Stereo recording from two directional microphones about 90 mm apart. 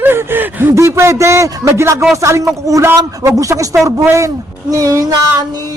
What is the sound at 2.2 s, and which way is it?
A woman's voice, 30° right (ahead or behind).